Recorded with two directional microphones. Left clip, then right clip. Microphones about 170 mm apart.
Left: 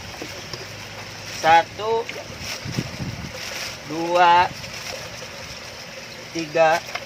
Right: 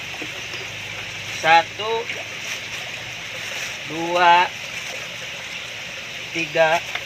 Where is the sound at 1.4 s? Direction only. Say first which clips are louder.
Even; 35° left (ahead or behind).